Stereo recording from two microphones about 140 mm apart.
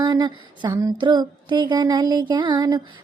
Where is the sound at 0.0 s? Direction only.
30° right (ahead or behind).